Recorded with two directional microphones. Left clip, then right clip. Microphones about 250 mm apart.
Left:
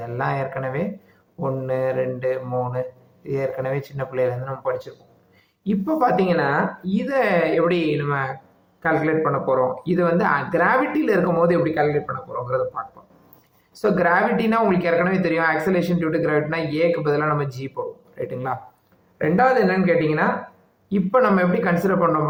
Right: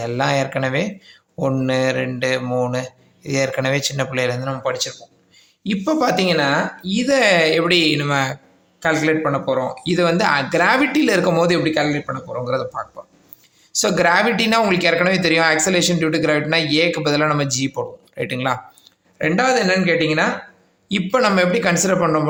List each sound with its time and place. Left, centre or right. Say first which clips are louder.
0.0 s speech: right 5 dB; right
13.8 s speech: right 2 dB; right